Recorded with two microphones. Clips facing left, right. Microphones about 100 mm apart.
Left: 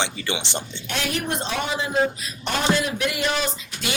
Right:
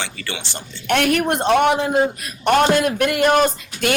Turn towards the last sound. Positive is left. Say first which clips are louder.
# right 10 dB
turn(degrees=-55)  # may be behind; listen again after turning